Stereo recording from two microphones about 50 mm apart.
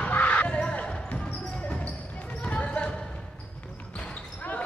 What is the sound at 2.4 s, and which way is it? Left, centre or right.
Basketball bounce, left.